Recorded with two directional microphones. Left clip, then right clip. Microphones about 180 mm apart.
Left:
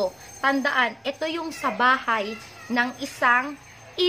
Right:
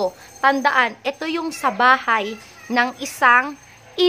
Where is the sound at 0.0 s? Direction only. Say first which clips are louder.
Right 6 dB; 30° right (ahead or behind).